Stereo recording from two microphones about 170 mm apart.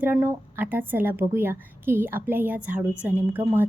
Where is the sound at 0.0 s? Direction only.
10° right (ahead or behind).